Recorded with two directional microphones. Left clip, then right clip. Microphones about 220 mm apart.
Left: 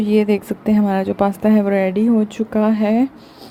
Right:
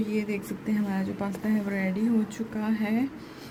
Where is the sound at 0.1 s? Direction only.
35° left (ahead or behind).